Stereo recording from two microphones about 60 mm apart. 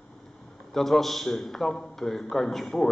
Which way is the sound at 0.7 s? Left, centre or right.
Centre.